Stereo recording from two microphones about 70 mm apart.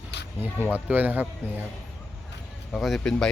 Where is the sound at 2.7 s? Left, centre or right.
Centre.